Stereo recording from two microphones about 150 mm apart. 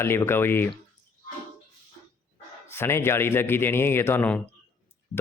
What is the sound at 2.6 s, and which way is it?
A man's voice, 15° left (ahead or behind).